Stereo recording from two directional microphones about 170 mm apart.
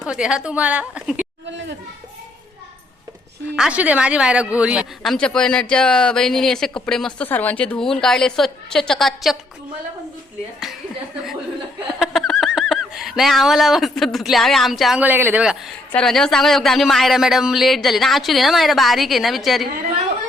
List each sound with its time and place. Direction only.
0.0 s speech: 5° right (ahead or behind)
1.5 s children playing: 90° right
3.5 s a woman's voice: 5° right (ahead or behind)
5.1 s speech: 5° left (ahead or behind)
11.9 s speech: centre (ahead or behind)
15.9 s speech: 5° left (ahead or behind)